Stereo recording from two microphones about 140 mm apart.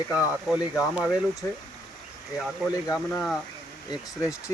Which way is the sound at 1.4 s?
20° left (ahead or behind).